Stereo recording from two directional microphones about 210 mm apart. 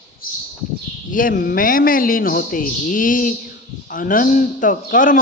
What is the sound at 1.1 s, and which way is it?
A man's voice, 40° left (ahead or behind).